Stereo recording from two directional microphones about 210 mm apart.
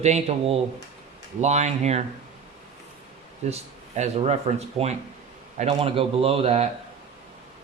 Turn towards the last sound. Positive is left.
turn(degrees=-30)  # may be behind; listen again after turning